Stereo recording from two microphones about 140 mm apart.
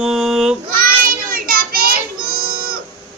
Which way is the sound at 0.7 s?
90° right.